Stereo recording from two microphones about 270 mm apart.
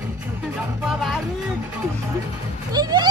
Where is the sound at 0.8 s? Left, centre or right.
Centre.